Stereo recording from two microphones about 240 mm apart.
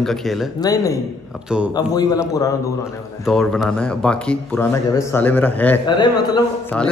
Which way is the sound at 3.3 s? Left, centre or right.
Centre.